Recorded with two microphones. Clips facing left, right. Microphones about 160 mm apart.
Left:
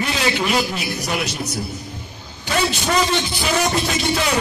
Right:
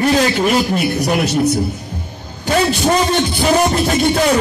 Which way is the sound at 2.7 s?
50° right (ahead or behind).